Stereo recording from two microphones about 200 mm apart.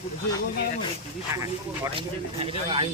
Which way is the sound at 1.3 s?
15° right (ahead or behind).